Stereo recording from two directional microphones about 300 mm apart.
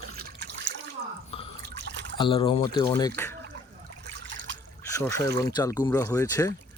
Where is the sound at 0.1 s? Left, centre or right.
Right.